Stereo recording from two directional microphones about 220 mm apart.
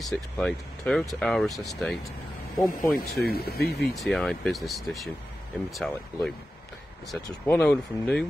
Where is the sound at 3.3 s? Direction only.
45° left (ahead or behind).